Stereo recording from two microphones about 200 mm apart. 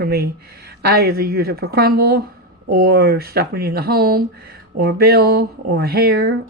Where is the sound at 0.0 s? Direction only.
50° right (ahead or behind).